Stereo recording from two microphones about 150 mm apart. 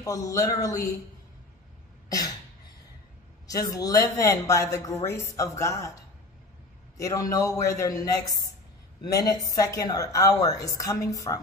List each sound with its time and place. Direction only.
0.0 s speech: 25° left (ahead or behind)
2.0 s cough: 25° left (ahead or behind)
3.4 s speech: 25° left (ahead or behind)
7.0 s speech: 20° left (ahead or behind)
9.2 s speech: 25° left (ahead or behind)